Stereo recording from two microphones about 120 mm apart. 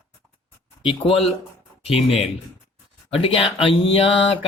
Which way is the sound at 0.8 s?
55° left (ahead or behind).